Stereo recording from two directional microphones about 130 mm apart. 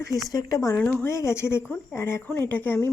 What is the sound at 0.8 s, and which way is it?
Speech, 15° left (ahead or behind).